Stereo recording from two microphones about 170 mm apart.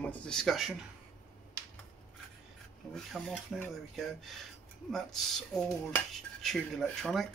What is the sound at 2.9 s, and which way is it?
Dishes, centre (ahead or behind).